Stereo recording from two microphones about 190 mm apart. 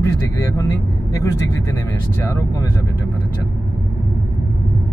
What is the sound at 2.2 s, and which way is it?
Speech, 15° left (ahead or behind).